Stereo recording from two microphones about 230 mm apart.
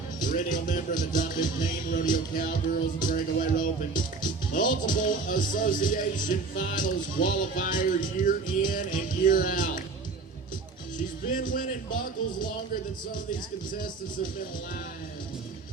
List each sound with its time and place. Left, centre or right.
0.2 s speech: left
10.9 s speech: left